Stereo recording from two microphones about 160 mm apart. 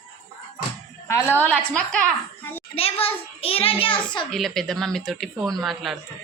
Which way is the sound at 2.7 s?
35° left (ahead or behind).